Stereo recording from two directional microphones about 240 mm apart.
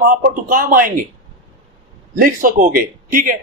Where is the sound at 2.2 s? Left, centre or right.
Right.